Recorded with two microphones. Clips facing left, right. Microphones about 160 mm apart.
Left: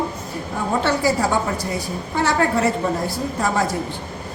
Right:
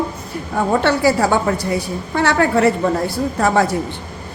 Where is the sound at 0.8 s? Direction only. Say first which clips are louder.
Right 3 dB; 65° right (ahead or behind).